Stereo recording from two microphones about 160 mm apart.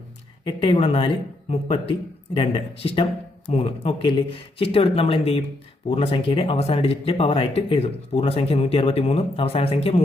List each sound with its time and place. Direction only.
0.4 s speech: 30° left (ahead or behind)